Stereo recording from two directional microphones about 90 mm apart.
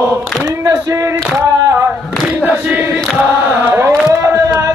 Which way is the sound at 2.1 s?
5° right (ahead or behind).